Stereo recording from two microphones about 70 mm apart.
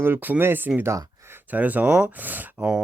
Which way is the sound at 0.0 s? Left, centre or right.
Right.